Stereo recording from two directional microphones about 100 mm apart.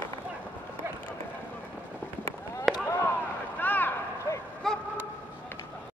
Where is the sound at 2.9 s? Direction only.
25° left (ahead or behind).